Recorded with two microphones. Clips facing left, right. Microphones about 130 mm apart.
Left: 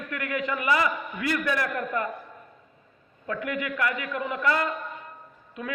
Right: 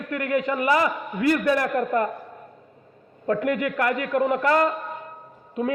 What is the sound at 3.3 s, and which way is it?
A man's voice, 45° right (ahead or behind).